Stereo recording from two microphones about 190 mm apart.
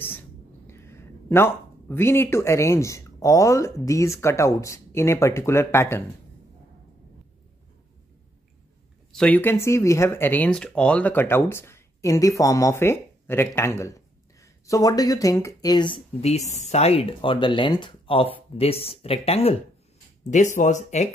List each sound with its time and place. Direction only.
0.7 s speech: 15° left (ahead or behind)
9.1 s speech: 5° left (ahead or behind); by 21.1 s 40° left (ahead or behind)